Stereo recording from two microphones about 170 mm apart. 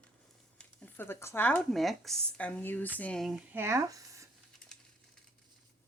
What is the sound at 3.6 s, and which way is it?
Speech, 15° right (ahead or behind).